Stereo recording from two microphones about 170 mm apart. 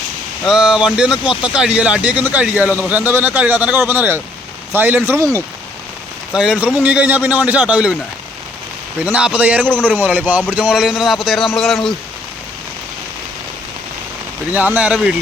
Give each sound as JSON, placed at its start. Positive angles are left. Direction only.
{"t": 0.4, "sound": "speech", "side_deg": -5}
{"t": 6.3, "sound": "speech", "side_deg": -5}
{"t": 9.0, "sound": "a man's voice", "side_deg": -10}
{"t": 14.5, "sound": "speech", "side_deg": -10}